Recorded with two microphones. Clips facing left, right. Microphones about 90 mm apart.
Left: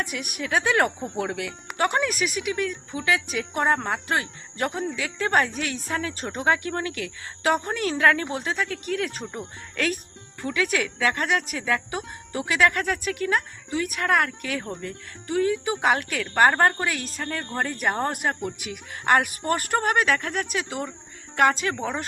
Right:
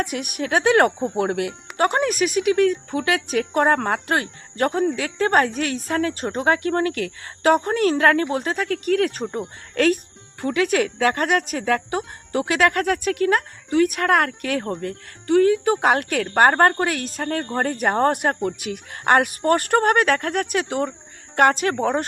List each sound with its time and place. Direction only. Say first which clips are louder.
0.2 s speech: right 3 dB; 50° right (ahead or behind)
0.9 s speech: right 7 dB; 15° right (ahead or behind)
1.2 s speech: right 5 dB; 45° right (ahead or behind)
2.4 s speech: right 10 dB; 55° right (ahead or behind)
17.8 s speech: right 7 dB; 40° right (ahead or behind)